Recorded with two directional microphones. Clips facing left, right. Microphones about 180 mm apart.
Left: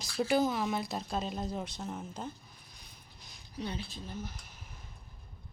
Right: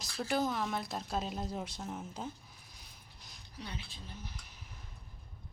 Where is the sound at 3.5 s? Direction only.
25° left (ahead or behind).